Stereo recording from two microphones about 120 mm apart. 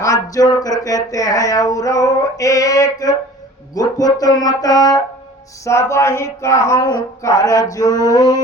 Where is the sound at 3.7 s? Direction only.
30° left (ahead or behind).